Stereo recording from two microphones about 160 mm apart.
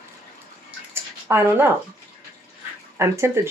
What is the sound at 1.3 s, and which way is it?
Speech, 15° right (ahead or behind).